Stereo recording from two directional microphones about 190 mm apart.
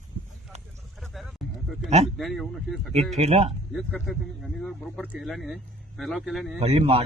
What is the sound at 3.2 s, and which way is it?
Speech, 35° right (ahead or behind).